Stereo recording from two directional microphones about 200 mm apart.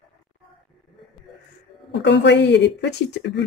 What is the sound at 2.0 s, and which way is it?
Speech, 60° left (ahead or behind).